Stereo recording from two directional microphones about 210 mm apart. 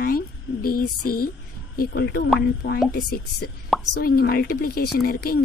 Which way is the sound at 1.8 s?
50° left (ahead or behind).